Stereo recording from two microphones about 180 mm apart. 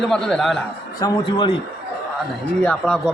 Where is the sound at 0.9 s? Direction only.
20° left (ahead or behind).